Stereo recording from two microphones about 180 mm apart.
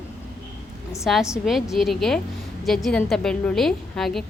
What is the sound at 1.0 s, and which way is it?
A woman's voice, centre (ahead or behind).